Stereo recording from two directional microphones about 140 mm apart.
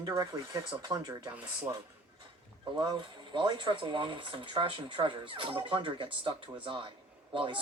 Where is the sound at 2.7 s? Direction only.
35° right (ahead or behind).